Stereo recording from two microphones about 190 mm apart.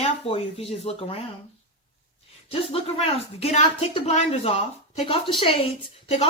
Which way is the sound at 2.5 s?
30° left (ahead or behind).